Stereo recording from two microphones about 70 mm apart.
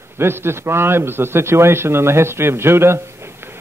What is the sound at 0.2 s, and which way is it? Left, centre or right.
A man's voice, right.